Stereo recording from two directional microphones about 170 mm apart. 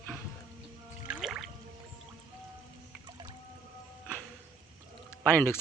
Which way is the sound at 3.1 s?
25° right (ahead or behind).